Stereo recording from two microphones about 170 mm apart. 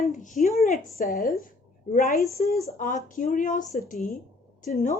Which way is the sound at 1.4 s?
55° left (ahead or behind).